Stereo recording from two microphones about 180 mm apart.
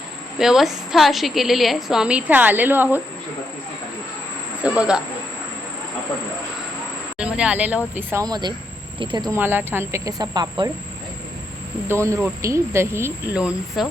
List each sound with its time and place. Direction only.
0.3 s a woman's voice: 5° right (ahead or behind)
4.6 s a woman's voice: 5° right (ahead or behind)
7.2 s speech: 5° right (ahead or behind); by 9.4 s 25° right (ahead or behind)
9.4 s speech: 10° right (ahead or behind)
11.9 s speech: 15° right (ahead or behind)